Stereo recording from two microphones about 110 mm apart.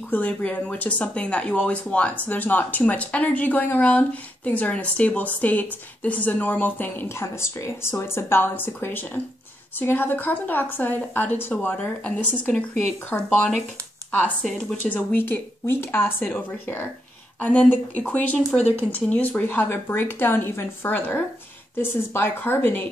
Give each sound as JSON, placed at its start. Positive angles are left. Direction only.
{"t": 0.1, "sound": "speech", "side_deg": 15}